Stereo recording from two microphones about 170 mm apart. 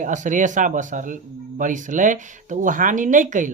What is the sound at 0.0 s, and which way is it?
Speech, 50° right (ahead or behind).